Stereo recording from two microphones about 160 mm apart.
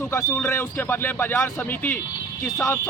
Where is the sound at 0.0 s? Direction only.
15° left (ahead or behind).